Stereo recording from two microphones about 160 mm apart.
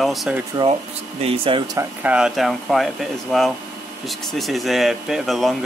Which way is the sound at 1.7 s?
10° right (ahead or behind).